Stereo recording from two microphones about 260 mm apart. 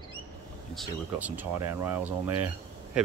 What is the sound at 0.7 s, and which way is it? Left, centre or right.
Speech, centre.